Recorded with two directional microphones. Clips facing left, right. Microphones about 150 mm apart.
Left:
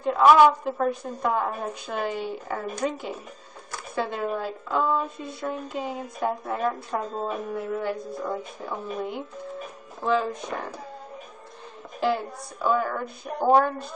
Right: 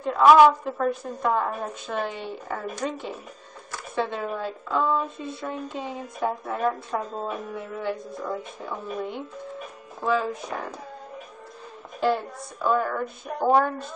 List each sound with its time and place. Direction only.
0.0 s a woman's voice: centre (ahead or behind)
12.0 s a woman's voice: centre (ahead or behind)